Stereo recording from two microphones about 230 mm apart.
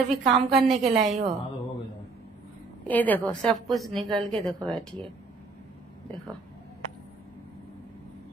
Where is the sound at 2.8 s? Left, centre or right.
Centre.